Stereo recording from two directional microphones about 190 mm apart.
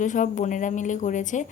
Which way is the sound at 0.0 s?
40° left (ahead or behind).